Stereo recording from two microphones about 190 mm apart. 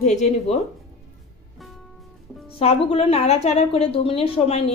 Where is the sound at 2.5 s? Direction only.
30° left (ahead or behind).